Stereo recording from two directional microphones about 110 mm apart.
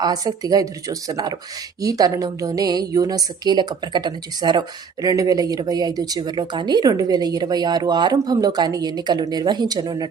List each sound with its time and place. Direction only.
0.0 s a woman's voice: 35° right (ahead or behind)